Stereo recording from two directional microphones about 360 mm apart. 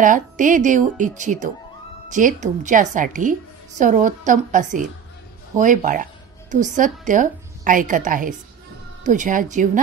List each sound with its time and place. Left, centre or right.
0.0 s a woman's voice: right